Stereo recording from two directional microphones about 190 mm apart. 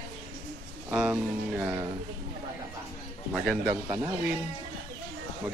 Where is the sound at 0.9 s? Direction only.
10° right (ahead or behind).